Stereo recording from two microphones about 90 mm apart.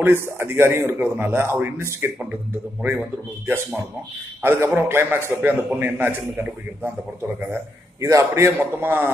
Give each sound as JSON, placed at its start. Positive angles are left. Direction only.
{"t": 0.0, "sound": "a man's voice", "side_deg": -25}